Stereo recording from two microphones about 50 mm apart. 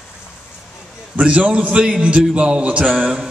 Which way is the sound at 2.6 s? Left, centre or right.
Right.